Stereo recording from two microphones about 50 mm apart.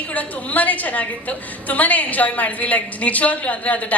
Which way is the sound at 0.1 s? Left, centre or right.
Left.